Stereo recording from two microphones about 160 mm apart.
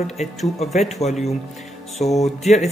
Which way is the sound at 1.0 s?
40° left (ahead or behind).